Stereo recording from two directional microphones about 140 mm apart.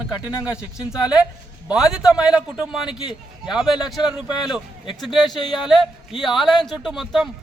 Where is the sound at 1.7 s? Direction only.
5° right (ahead or behind).